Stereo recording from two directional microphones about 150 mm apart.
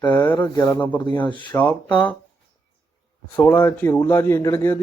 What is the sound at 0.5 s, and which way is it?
A man's voice, 25° left (ahead or behind).